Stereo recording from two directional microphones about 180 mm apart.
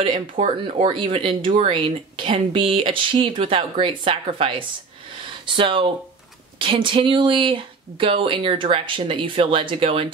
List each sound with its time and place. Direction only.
0.0 s speech: 30° right (ahead or behind)